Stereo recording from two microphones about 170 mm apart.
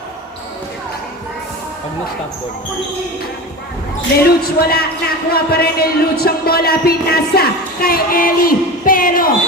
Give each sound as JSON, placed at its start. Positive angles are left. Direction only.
{"t": 4.4, "sound": "speech", "side_deg": 65}